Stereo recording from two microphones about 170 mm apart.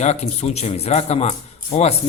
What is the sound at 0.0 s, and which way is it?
A man's voice, 40° left (ahead or behind).